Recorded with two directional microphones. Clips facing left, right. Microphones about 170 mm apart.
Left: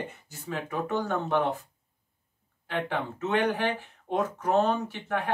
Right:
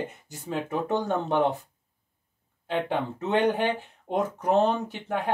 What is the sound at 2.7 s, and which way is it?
Speech, 20° right (ahead or behind).